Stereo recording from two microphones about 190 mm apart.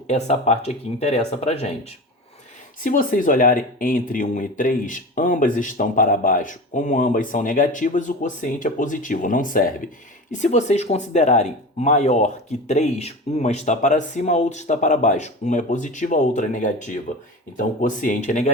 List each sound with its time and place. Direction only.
0.1 s speech: 35° left (ahead or behind)
2.8 s speech: 45° left (ahead or behind)